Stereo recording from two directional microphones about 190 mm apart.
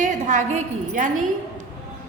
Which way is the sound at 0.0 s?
40° right (ahead or behind).